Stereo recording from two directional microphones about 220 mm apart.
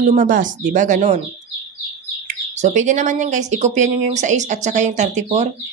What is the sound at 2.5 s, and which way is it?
Speech, 30° right (ahead or behind).